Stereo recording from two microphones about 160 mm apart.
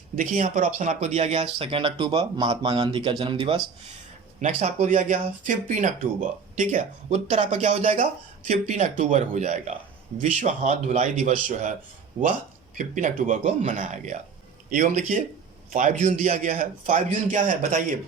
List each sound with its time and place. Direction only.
0.2 s speech: 55° right (ahead or behind); by 3.6 s 35° right (ahead or behind)
4.4 s speech: 50° right (ahead or behind)